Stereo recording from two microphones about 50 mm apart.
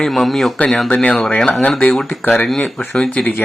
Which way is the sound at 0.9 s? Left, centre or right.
Centre.